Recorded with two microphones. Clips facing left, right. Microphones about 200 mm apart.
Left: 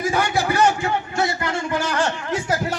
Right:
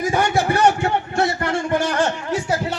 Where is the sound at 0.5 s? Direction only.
60° right (ahead or behind).